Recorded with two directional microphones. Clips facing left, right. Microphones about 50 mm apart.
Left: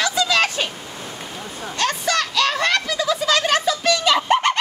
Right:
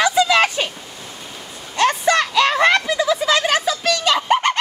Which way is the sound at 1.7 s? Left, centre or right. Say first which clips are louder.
Right 5 dB; centre.